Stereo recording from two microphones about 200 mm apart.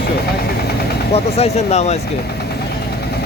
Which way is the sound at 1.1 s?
30° left (ahead or behind).